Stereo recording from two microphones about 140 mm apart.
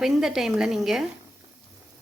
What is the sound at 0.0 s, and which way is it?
A woman's voice, 5° right (ahead or behind).